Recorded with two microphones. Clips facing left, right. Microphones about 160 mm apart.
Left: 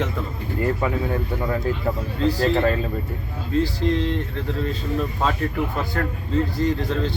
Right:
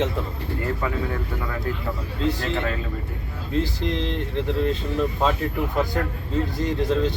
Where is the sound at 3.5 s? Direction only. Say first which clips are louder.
Left 4 dB; 20° right (ahead or behind).